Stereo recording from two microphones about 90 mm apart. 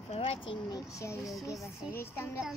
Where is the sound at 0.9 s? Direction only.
35° left (ahead or behind).